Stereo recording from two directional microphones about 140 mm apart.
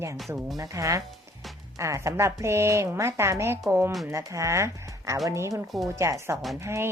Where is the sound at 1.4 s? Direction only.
Centre (ahead or behind).